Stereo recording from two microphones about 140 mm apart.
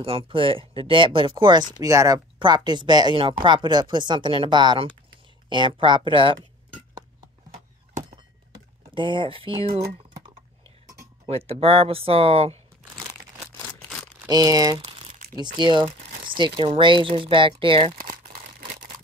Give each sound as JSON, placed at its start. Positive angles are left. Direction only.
{"t": 0.0, "sound": "speech", "side_deg": -40}
{"t": 8.5, "sound": "speech", "side_deg": -30}
{"t": 11.2, "sound": "speech", "side_deg": -45}
{"t": 14.3, "sound": "speech", "side_deg": -25}
{"t": 14.9, "sound": "crumpling", "side_deg": -40}
{"t": 15.4, "sound": "speech", "side_deg": -35}
{"t": 17.9, "sound": "crumpling", "side_deg": -85}